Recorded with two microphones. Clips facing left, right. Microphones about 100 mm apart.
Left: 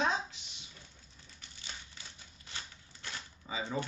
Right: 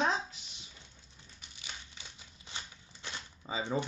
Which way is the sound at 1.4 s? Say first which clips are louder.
Right 1 dB; 15° right (ahead or behind).